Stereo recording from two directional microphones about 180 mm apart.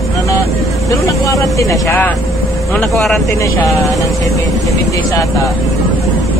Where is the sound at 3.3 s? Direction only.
15° left (ahead or behind).